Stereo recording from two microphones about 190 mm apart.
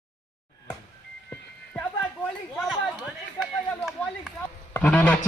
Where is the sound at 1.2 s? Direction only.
5° left (ahead or behind).